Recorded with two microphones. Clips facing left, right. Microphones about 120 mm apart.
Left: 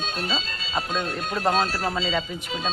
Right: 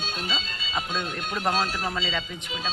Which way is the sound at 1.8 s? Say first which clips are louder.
Left 4 dB; 10° left (ahead or behind).